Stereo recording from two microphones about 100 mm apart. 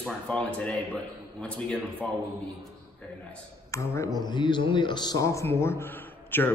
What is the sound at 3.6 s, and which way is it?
A man's voice, 30° left (ahead or behind).